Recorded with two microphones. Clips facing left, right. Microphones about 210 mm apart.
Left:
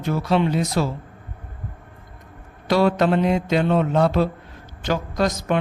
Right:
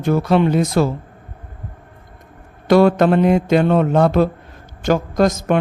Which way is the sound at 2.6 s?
50° right (ahead or behind).